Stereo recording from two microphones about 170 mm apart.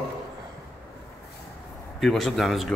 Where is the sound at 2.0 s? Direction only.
Centre (ahead or behind).